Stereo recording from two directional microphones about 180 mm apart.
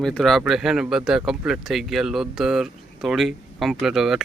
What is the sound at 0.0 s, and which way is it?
Speech, centre (ahead or behind).